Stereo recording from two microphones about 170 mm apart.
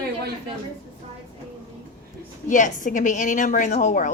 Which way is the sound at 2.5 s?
50° left (ahead or behind).